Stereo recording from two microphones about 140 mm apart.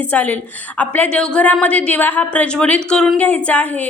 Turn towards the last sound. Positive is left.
turn(degrees=10)  # may be behind; listen again after turning